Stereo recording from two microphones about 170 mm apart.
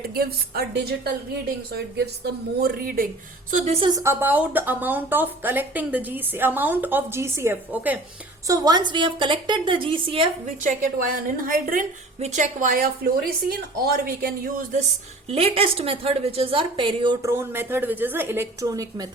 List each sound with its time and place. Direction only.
0.1 s a woman's voice: 65° right (ahead or behind)
3.5 s a woman's voice: 40° right (ahead or behind)
3.8 s speech: 20° right (ahead or behind)
8.4 s a woman's voice: 20° right (ahead or behind)
10.4 s a woman's voice: 50° right (ahead or behind)
12.2 s a woman's voice: 45° right (ahead or behind)
15.3 s a woman's voice: 35° right (ahead or behind)
17.3 s speech: 15° right (ahead or behind)